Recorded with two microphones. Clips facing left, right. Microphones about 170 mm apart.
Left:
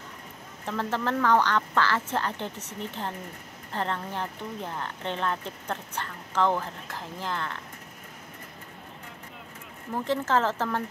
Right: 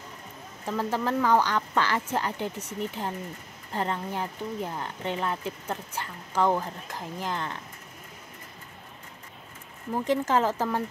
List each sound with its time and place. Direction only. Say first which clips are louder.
0.7 s speech: right 1 dB; 10° right (ahead or behind)
10.0 s speech: right 1 dB; 15° right (ahead or behind)